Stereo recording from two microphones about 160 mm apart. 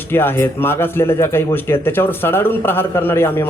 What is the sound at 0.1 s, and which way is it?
Speech, 15° left (ahead or behind).